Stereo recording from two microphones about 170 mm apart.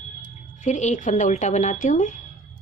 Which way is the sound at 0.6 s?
45° left (ahead or behind).